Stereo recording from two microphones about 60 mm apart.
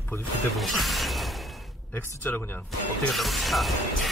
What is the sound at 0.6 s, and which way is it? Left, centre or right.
Speech, centre.